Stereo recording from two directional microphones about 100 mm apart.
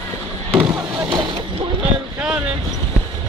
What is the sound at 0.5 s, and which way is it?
Fireworks, 15° right (ahead or behind).